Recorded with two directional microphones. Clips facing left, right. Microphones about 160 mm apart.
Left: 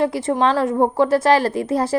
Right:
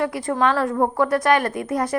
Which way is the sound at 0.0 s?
25° left (ahead or behind).